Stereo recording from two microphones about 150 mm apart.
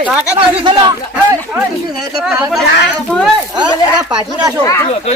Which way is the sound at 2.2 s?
Centre (ahead or behind).